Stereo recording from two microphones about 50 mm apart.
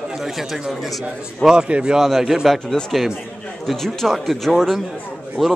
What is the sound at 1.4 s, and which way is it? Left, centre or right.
Speech, centre.